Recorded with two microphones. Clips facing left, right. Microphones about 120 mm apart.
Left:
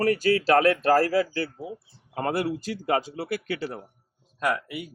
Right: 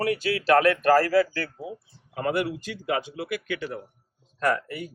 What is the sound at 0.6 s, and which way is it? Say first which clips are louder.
Speech: even; 25° left (ahead or behind).